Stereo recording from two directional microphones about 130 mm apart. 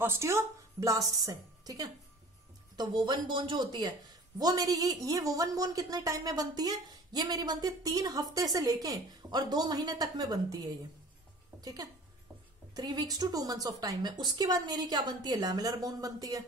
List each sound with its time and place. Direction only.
0.0 s a woman's voice: 20° right (ahead or behind)
11.6 s a woman's voice: 30° right (ahead or behind)